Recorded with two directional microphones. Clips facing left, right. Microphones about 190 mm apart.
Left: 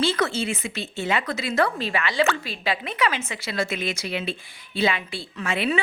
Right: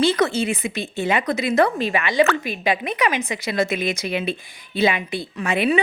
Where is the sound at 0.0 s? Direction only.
15° right (ahead or behind).